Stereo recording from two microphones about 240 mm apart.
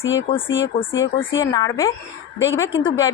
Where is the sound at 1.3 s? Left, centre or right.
Centre.